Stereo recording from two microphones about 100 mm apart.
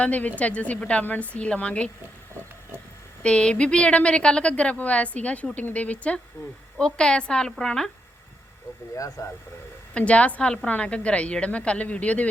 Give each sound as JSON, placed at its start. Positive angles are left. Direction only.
{"t": 0.0, "sound": "a woman's voice", "side_deg": 15}
{"t": 3.2, "sound": "a woman's voice", "side_deg": 10}
{"t": 6.4, "sound": "speech", "side_deg": 40}
{"t": 6.7, "sound": "a woman's voice", "side_deg": 10}
{"t": 9.0, "sound": "speech", "side_deg": 35}
{"t": 9.9, "sound": "a woman's voice", "side_deg": 15}